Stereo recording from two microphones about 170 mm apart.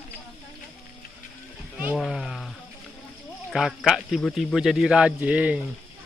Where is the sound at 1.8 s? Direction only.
5° right (ahead or behind).